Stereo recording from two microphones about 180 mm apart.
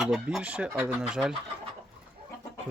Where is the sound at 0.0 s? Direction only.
Centre (ahead or behind).